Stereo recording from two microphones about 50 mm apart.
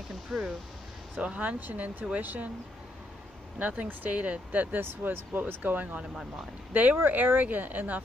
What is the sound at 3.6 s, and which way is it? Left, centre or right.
Speech, right.